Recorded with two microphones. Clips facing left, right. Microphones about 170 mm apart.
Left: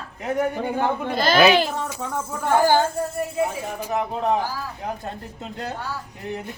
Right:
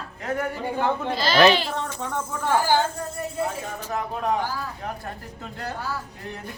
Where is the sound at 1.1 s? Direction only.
50° left (ahead or behind).